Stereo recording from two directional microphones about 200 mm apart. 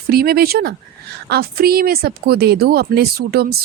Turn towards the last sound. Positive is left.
turn(degrees=-50)  # may be behind; listen again after turning